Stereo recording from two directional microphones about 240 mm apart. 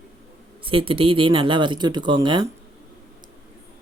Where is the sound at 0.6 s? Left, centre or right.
Right.